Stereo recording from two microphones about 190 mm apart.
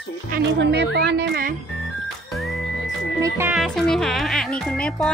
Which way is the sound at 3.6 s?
Centre (ahead or behind).